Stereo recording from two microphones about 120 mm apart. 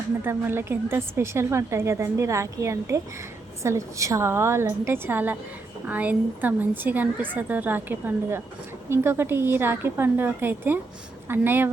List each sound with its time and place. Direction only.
0.3 s a woman's voice: 20° right (ahead or behind)